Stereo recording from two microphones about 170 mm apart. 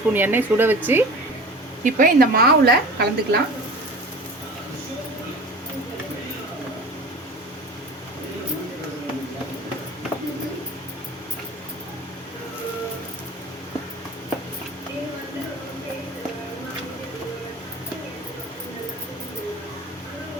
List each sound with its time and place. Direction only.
0.1 s speech: 10° right (ahead or behind)
1.8 s a woman's voice: 60° right (ahead or behind)